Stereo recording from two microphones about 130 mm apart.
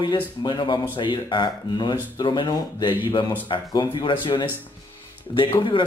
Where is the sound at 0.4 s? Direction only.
35° left (ahead or behind).